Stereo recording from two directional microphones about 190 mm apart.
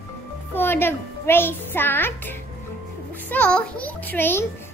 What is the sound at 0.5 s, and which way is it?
A child's voice, 10° left (ahead or behind).